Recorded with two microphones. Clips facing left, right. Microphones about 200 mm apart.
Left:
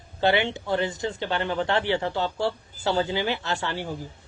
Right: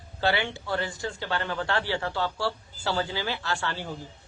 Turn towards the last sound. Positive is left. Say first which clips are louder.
# left 2 dB
turn(degrees=15)  # may be behind; listen again after turning